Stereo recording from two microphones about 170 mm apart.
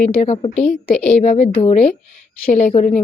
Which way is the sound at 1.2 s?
45° left (ahead or behind).